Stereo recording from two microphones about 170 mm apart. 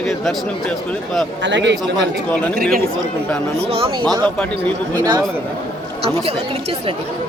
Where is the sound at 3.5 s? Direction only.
35° right (ahead or behind).